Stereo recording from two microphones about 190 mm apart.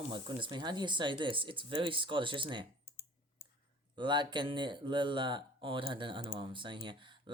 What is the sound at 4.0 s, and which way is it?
Speech, 25° right (ahead or behind).